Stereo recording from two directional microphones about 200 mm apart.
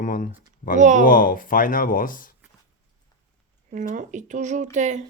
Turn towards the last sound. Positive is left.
turn(degrees=-35)  # may be behind; listen again after turning